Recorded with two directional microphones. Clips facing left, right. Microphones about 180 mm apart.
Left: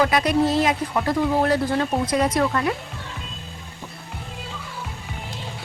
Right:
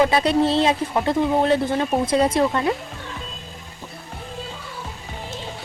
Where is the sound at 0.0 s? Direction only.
30° right (ahead or behind).